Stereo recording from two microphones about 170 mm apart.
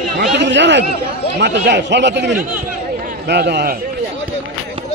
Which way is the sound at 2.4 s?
55° right (ahead or behind).